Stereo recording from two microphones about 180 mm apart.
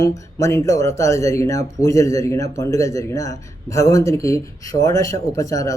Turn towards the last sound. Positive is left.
turn(degrees=20)  # may be behind; listen again after turning